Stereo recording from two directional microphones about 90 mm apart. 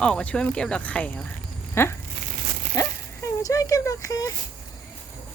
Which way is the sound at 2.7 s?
35° left (ahead or behind).